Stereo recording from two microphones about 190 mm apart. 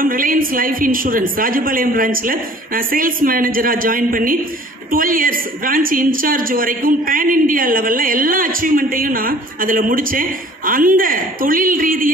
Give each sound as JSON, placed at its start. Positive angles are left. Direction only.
{"t": 0.0, "sound": "a woman's voice", "side_deg": -45}